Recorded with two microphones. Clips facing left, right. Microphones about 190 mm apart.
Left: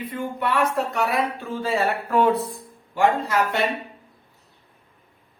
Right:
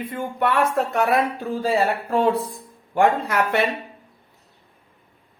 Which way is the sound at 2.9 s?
60° right (ahead or behind).